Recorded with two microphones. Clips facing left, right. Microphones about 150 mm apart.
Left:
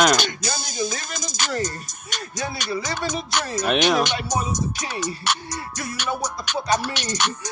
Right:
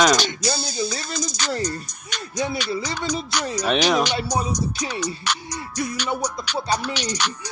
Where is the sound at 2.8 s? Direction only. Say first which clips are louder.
Left 1 dB; 50° left (ahead or behind).